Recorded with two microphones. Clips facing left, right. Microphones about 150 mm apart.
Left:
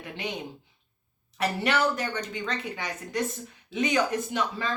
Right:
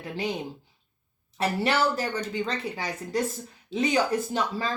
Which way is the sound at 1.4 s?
30° right (ahead or behind).